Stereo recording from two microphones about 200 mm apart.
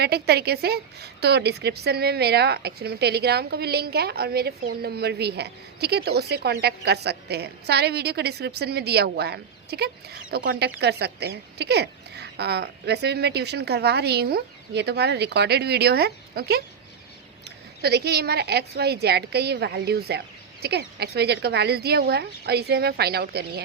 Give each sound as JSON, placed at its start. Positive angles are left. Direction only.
{"t": 0.0, "sound": "a woman's voice", "side_deg": -55}
{"t": 17.8, "sound": "a woman's voice", "side_deg": -55}